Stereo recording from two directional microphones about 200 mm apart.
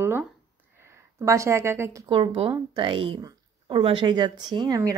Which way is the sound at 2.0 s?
25° right (ahead or behind).